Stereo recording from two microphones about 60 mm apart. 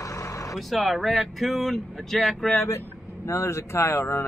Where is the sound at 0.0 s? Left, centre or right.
Left.